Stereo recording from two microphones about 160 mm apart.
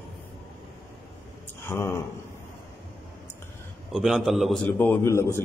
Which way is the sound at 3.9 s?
Centre (ahead or behind).